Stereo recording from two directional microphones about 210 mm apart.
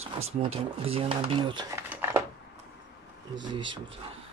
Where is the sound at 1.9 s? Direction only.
10° right (ahead or behind).